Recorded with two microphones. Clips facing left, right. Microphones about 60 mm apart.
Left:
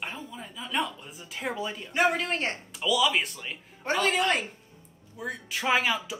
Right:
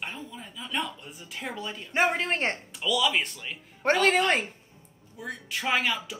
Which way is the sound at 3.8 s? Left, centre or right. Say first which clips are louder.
Right 5 dB; right.